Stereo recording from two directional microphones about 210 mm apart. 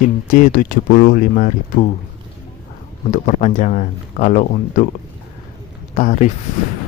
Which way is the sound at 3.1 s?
35° left (ahead or behind).